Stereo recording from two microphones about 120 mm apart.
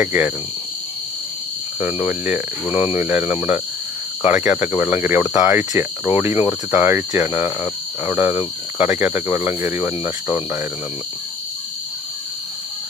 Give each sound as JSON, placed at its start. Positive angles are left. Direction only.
{"t": 0.0, "sound": "cricket", "side_deg": -15}
{"t": 1.8, "sound": "cricket", "side_deg": -15}